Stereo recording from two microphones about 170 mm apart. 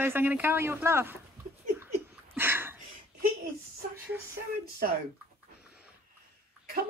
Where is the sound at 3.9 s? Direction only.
10° right (ahead or behind).